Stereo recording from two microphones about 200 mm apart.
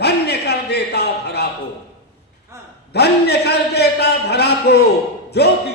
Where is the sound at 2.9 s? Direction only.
55° left (ahead or behind).